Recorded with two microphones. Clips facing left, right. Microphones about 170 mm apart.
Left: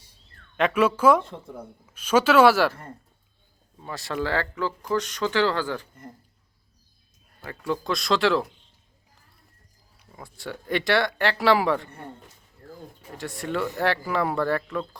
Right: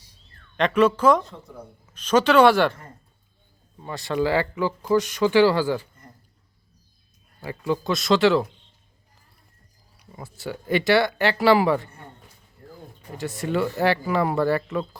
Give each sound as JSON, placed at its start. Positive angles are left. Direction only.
{"t": 0.5, "sound": "speech", "side_deg": 5}
{"t": 3.8, "sound": "speech", "side_deg": 0}
{"t": 7.4, "sound": "speech", "side_deg": -5}
{"t": 10.1, "sound": "speech", "side_deg": -5}
{"t": 12.6, "sound": "a sound", "side_deg": -20}
{"t": 13.0, "sound": "speech", "side_deg": 0}